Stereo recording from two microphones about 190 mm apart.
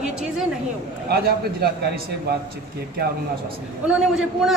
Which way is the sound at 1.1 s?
55° right (ahead or behind).